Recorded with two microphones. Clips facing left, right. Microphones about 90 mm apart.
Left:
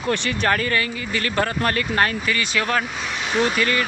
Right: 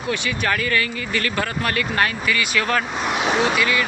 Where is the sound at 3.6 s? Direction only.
40° left (ahead or behind).